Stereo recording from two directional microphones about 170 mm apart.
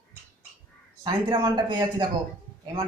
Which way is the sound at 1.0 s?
25° right (ahead or behind).